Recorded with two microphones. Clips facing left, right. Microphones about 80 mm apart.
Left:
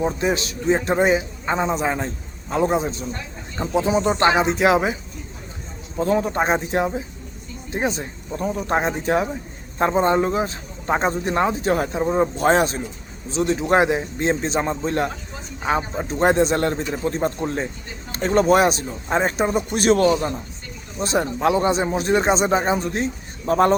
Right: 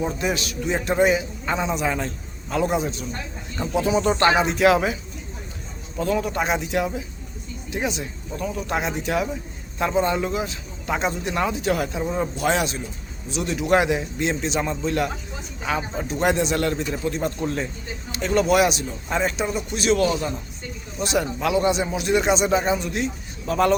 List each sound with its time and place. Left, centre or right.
0.0 s a man's voice: left
6.0 s speech: left
19.2 s speech: left